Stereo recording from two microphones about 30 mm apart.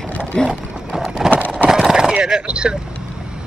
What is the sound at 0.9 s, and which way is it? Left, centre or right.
Vehicle, centre.